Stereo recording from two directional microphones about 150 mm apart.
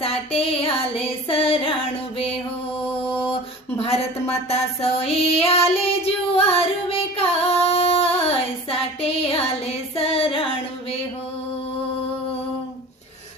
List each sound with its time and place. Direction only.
0.0 s female singing: 40° left (ahead or behind)
3.0 s mantra: 35° left (ahead or behind)
3.8 s speech: 45° left (ahead or behind)
4.9 s female singing: 40° left (ahead or behind)